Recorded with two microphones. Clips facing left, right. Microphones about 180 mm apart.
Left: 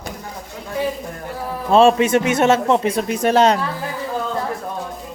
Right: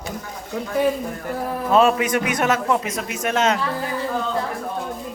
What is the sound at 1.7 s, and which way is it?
Speech, 30° left (ahead or behind).